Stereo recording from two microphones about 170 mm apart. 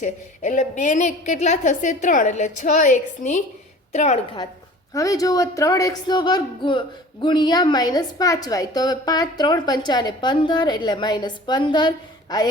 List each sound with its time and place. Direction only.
0.0 s a woman's voice: 45° left (ahead or behind)
4.9 s speech: 20° left (ahead or behind)